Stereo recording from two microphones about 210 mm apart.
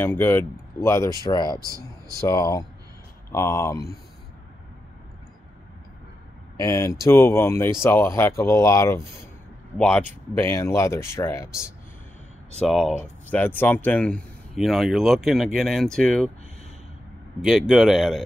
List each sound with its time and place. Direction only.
0.0 s speech: 10° left (ahead or behind)
1.6 s speech: 15° right (ahead or behind)
2.1 s speech: 15° left (ahead or behind)
6.6 s speech: 15° left (ahead or behind)
12.5 s speech: centre (ahead or behind)
17.4 s speech: centre (ahead or behind)